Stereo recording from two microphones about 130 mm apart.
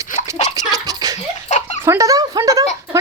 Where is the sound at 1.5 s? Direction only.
60° left (ahead or behind).